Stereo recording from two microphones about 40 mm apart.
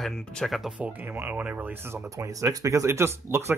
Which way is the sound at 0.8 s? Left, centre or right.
Right.